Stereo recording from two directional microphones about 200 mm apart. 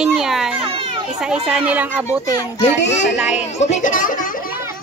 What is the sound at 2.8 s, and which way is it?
Speech, 65° left (ahead or behind).